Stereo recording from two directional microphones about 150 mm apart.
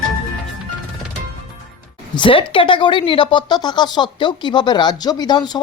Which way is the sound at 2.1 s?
35° left (ahead or behind).